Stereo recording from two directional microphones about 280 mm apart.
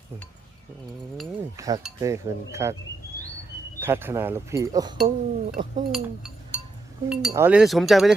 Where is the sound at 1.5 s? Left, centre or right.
Centre.